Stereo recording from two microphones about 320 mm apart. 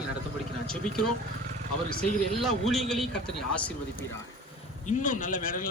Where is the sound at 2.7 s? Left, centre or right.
Centre.